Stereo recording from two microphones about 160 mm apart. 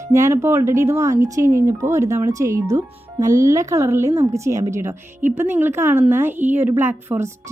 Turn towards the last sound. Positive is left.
turn(degrees=-15)  # may be behind; listen again after turning